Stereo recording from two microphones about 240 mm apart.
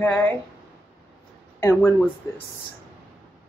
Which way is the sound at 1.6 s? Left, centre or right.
Centre.